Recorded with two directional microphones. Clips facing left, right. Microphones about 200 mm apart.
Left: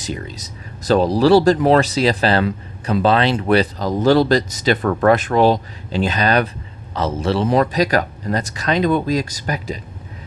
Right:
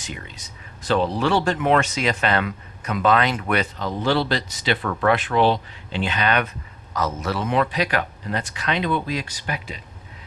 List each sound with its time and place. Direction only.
0.0 s speech: 35° left (ahead or behind)